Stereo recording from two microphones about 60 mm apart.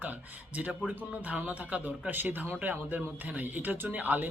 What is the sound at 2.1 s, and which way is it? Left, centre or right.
Speech, right.